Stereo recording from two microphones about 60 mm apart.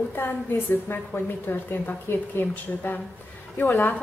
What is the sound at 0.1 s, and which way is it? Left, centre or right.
A woman's voice, left.